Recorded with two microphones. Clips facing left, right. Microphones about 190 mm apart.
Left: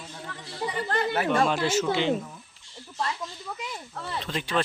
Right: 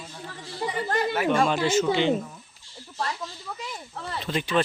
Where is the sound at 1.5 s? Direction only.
Centre (ahead or behind).